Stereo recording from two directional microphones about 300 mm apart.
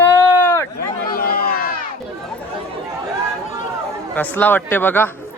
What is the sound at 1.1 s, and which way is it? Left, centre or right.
Speech, left.